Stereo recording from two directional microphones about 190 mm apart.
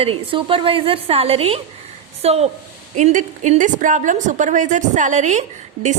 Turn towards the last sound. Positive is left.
turn(degrees=-40)  # may be behind; listen again after turning